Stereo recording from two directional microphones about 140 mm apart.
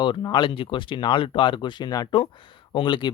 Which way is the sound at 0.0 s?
35° left (ahead or behind).